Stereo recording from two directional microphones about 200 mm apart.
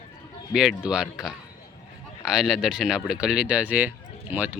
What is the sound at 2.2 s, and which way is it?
A man's voice, 5° right (ahead or behind).